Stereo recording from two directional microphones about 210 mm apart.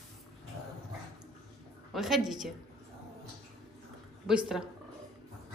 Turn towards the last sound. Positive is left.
turn(degrees=0)  # may be behind; listen again after turning